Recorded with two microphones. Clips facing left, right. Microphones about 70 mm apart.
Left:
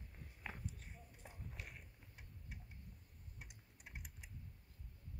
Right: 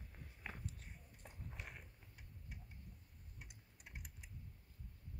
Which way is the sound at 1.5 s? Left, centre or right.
Centre.